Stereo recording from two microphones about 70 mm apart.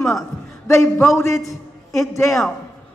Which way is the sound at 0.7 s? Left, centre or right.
Left.